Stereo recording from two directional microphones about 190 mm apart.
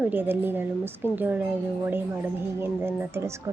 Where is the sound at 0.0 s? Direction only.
10° right (ahead or behind).